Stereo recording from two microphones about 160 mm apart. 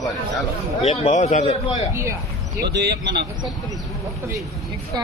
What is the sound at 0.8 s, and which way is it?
Speech, 40° left (ahead or behind).